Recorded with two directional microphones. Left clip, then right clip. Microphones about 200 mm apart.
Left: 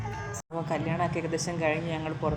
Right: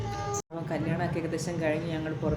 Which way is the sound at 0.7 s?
10° left (ahead or behind).